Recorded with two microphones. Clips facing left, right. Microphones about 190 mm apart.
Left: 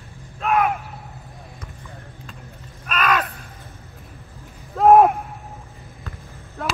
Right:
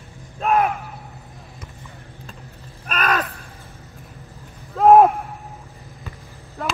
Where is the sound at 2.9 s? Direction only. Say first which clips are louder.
Left 1 dB; 40° right (ahead or behind).